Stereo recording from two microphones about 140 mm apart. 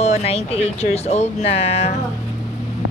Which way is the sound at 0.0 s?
50° left (ahead or behind).